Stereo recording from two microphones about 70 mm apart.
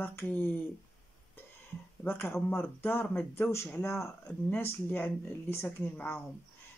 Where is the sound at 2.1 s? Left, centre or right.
Left.